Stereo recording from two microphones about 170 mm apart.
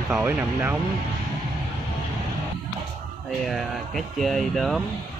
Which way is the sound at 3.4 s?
Centre (ahead or behind).